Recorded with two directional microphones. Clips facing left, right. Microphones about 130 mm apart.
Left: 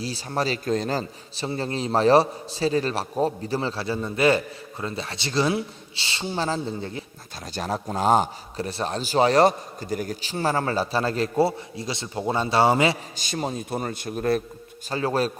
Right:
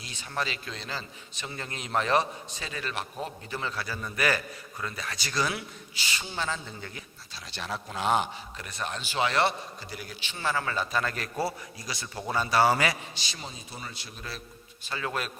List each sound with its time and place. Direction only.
0.0 s a man's voice: 35° left (ahead or behind)
7.3 s a man's voice: 45° left (ahead or behind); by 13.0 s 25° left (ahead or behind)
13.1 s speech: 50° left (ahead or behind)
14.8 s a man's voice: 35° left (ahead or behind)